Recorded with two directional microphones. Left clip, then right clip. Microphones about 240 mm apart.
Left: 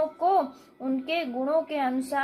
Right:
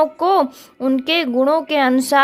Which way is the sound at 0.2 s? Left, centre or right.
Right.